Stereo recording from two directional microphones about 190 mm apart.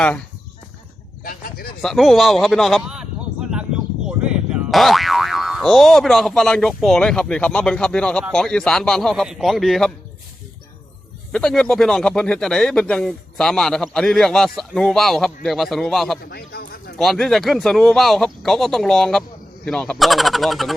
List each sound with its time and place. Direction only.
1.2 s speech: 50° left (ahead or behind)
1.8 s speech: centre (ahead or behind)
11.3 s speech: 5° left (ahead or behind)
16.2 s a man's voice: 55° left (ahead or behind)
17.0 s speech: centre (ahead or behind)